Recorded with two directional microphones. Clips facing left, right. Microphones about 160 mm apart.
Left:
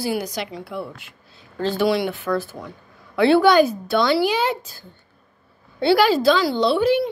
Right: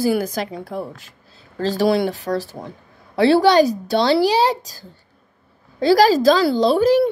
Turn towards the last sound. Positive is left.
turn(degrees=-40)  # may be behind; listen again after turning